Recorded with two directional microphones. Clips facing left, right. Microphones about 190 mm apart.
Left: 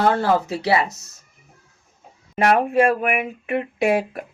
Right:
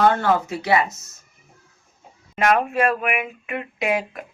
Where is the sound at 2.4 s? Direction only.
35° left (ahead or behind).